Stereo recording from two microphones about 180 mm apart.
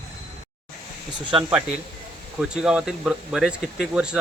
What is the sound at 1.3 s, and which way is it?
Speech, 30° right (ahead or behind).